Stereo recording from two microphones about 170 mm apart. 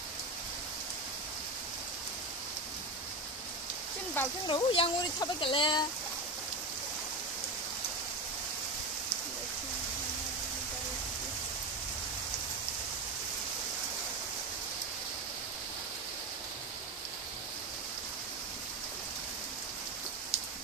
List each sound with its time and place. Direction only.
4.2 s speech: 10° left (ahead or behind)
4.5 s speech: 30° left (ahead or behind)